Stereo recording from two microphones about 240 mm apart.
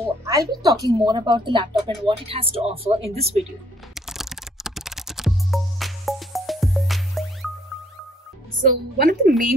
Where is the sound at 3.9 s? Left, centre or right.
Centre.